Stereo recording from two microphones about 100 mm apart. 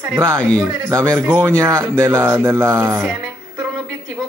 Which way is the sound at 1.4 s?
30° right (ahead or behind).